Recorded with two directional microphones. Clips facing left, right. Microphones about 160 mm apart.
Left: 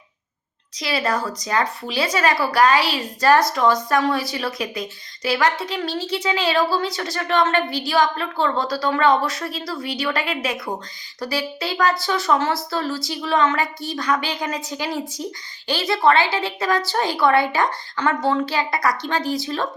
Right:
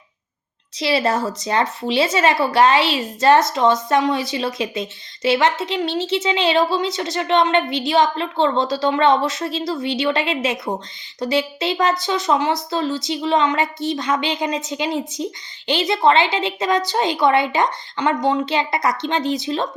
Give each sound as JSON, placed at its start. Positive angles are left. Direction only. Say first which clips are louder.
{"t": 0.8, "sound": "speech", "louder": "right 4 dB", "side_deg": -25}